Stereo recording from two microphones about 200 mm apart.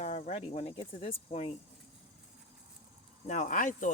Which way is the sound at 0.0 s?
35° left (ahead or behind).